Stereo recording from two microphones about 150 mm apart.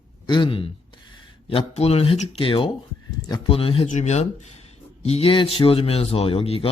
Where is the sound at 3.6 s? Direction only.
40° left (ahead or behind).